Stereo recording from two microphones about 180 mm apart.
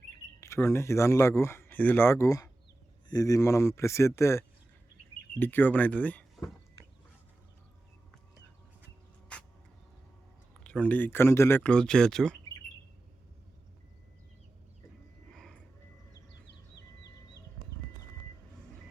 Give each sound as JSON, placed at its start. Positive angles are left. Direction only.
{"t": 0.3, "sound": "speech", "side_deg": 15}
{"t": 9.3, "sound": "rodents", "side_deg": 5}
{"t": 10.6, "sound": "speech", "side_deg": 5}
{"t": 15.3, "sound": "music", "side_deg": 5}